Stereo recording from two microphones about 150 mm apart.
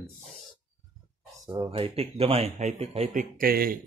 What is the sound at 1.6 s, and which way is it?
Speech, 40° right (ahead or behind).